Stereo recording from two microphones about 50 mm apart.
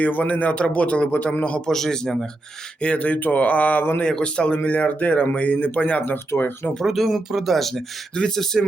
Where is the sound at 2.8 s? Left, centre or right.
Left.